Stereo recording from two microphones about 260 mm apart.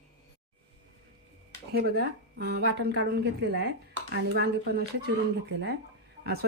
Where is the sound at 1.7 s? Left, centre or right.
Right.